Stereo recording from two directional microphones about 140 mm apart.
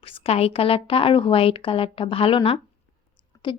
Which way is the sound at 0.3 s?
45° left (ahead or behind).